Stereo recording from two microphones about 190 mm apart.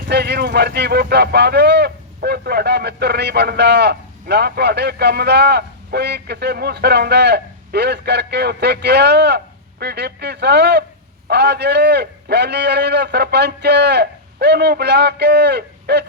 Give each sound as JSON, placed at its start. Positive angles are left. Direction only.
{"t": 0.1, "sound": "speech", "side_deg": -60}